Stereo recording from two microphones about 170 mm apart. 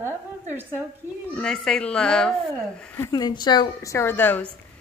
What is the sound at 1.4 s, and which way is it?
Speech, 5° left (ahead or behind).